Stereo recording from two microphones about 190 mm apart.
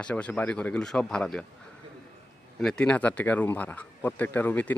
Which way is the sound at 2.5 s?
5° left (ahead or behind).